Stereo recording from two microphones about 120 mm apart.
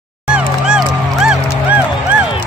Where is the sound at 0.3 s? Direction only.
5° right (ahead or behind).